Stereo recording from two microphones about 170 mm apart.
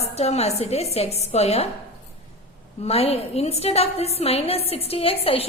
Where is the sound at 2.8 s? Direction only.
35° left (ahead or behind).